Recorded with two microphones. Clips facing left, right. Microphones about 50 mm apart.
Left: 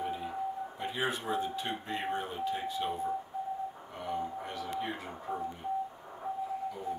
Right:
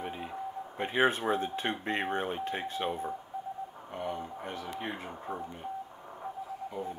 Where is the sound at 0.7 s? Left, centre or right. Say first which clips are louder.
Right 9 dB; right.